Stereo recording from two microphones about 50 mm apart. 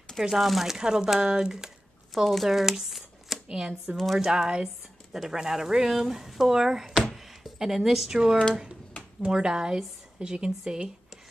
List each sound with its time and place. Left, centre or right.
0.2 s speech: centre
2.2 s speech: centre
3.4 s speech: centre
3.9 s speech: centre
4.2 s speech: centre